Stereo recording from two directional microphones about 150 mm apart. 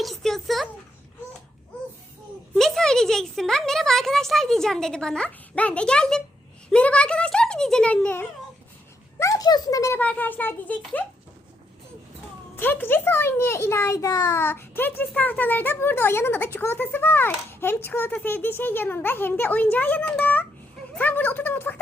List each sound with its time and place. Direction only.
0.0 s a sound: centre (ahead or behind)
2.6 s a child's voice: centre (ahead or behind)
9.1 s speech: 20° left (ahead or behind)
10.0 s a child's voice: 10° left (ahead or behind)
12.5 s a child's voice: 15° left (ahead or behind)